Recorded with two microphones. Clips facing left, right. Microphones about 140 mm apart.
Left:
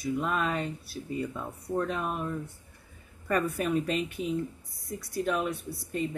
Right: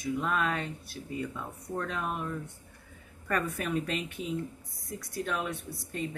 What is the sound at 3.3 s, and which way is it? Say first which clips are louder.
A woman's voice: left 4 dB; 10° left (ahead or behind).